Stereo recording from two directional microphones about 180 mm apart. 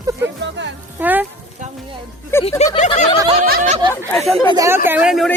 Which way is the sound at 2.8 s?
40° left (ahead or behind).